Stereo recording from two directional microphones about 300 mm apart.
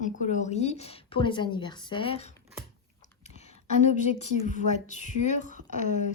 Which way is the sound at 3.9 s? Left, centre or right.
Left.